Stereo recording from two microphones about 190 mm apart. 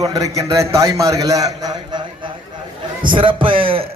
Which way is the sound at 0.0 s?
20° right (ahead or behind).